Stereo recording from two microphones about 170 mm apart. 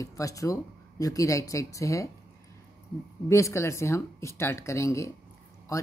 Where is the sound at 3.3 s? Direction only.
15° left (ahead or behind).